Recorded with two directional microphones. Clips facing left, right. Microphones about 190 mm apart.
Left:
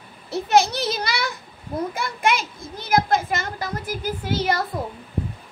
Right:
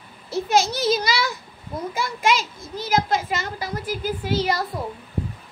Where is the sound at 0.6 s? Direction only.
60° left (ahead or behind).